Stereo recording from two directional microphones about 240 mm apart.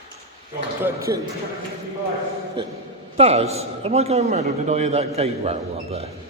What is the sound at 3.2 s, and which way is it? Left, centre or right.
A man's voice, right.